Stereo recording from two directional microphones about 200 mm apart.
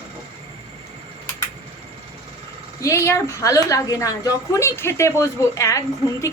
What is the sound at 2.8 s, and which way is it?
A woman's voice, 15° left (ahead or behind).